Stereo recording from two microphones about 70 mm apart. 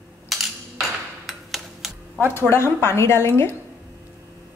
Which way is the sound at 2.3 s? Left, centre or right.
Left.